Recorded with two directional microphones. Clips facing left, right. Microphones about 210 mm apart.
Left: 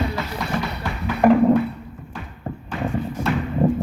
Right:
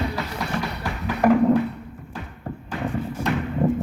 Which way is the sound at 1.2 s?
25° left (ahead or behind).